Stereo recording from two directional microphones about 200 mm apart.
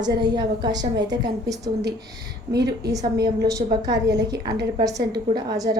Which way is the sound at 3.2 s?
20° right (ahead or behind).